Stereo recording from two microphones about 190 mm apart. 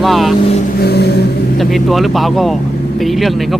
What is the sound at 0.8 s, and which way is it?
Vehicle, 60° left (ahead or behind).